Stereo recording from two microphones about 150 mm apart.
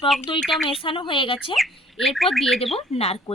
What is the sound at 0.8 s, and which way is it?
Speech, 35° left (ahead or behind).